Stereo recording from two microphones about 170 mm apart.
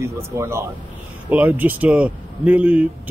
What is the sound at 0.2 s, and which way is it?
Speech, 15° right (ahead or behind).